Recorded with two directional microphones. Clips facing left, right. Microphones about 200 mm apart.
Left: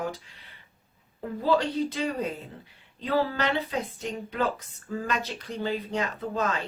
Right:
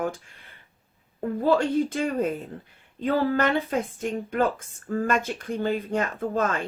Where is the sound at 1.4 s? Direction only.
50° right (ahead or behind).